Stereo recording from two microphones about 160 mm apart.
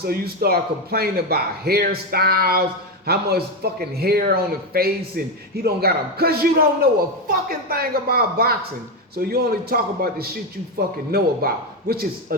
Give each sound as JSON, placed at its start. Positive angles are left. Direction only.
{"t": 0.0, "sound": "a man's voice", "side_deg": -70}